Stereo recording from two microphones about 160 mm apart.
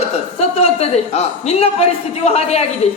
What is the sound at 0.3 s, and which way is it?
A woman's voice, 40° left (ahead or behind).